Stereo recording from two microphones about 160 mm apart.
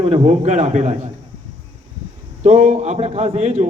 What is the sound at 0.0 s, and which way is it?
A man's voice, 40° right (ahead or behind).